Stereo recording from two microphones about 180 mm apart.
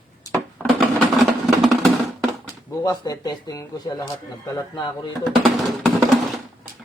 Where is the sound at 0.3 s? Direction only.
10° left (ahead or behind).